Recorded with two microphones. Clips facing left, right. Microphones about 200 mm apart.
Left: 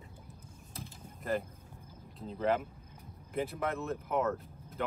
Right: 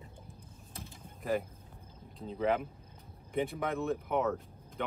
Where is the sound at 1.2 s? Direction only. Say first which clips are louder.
Right 1 dB; centre (ahead or behind).